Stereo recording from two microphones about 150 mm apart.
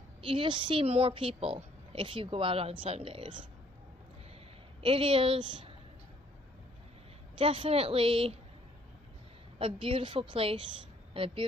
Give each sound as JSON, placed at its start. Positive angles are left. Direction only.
{"t": 0.2, "sound": "a woman's voice", "side_deg": -35}
{"t": 4.8, "sound": "a woman's voice", "side_deg": -35}
{"t": 7.3, "sound": "a woman's voice", "side_deg": -35}
{"t": 9.6, "sound": "a woman's voice", "side_deg": -35}